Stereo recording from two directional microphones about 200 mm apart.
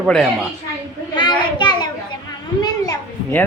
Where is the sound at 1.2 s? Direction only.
20° left (ahead or behind).